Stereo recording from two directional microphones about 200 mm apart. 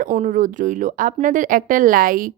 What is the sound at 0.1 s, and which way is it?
Speech, 35° right (ahead or behind).